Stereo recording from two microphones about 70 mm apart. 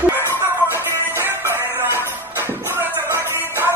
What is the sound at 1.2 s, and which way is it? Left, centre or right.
Music, right.